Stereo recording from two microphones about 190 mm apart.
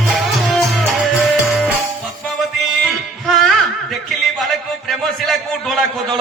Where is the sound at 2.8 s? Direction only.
Centre (ahead or behind).